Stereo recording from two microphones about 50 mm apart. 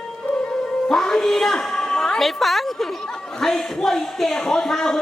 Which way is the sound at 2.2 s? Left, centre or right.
Centre.